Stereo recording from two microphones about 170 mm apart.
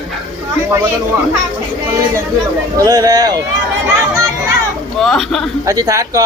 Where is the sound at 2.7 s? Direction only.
20° right (ahead or behind).